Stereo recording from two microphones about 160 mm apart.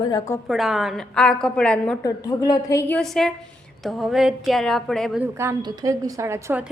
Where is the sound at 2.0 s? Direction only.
20° left (ahead or behind).